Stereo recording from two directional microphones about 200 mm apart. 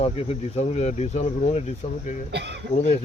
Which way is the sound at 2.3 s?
60° right (ahead or behind).